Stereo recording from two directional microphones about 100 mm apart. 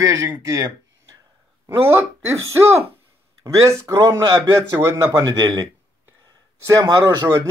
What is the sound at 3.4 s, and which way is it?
Speech, 30° right (ahead or behind).